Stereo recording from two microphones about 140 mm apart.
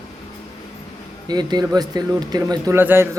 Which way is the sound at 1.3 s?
30° right (ahead or behind).